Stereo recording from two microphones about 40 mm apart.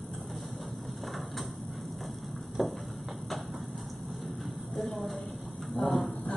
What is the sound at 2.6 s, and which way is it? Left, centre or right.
Clip-clop, centre.